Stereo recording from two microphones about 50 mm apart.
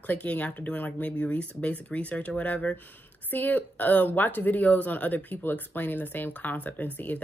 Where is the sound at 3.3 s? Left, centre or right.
Left.